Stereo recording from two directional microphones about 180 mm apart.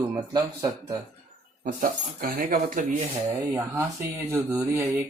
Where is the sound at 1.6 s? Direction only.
50° right (ahead or behind).